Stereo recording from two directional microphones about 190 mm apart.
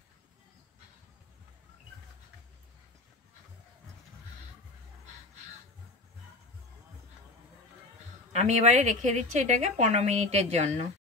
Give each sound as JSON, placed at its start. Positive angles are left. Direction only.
{"t": 8.3, "sound": "a woman's voice", "side_deg": -35}